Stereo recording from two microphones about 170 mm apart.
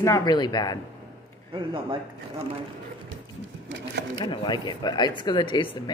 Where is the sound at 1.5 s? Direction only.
30° right (ahead or behind).